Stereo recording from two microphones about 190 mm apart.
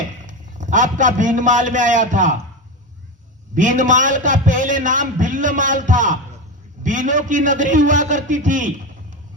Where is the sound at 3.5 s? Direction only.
40° right (ahead or behind).